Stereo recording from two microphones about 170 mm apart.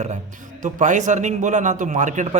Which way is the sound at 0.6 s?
50° right (ahead or behind).